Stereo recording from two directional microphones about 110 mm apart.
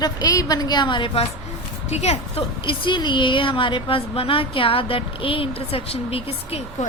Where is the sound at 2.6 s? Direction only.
45° left (ahead or behind).